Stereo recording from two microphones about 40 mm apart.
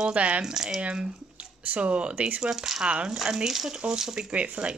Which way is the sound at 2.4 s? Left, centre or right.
Centre.